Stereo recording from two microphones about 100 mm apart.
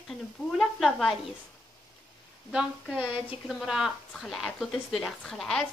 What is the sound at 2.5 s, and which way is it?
A woman's voice, 10° right (ahead or behind).